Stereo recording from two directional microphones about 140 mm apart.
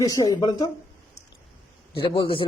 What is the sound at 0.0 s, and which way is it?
Speech, 25° left (ahead or behind).